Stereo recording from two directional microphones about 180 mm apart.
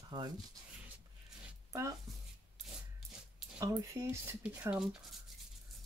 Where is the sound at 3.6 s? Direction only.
15° right (ahead or behind).